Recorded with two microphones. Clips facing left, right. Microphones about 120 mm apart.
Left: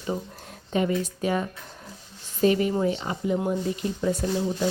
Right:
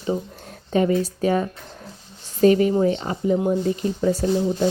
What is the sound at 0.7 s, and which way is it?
Speech, 35° right (ahead or behind).